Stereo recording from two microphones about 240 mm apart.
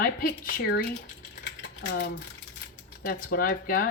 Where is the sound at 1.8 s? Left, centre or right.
Left.